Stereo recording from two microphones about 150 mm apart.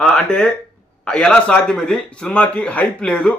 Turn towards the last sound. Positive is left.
turn(degrees=5)  # may be behind; listen again after turning